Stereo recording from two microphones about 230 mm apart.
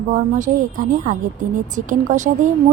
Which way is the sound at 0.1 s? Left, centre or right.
Right.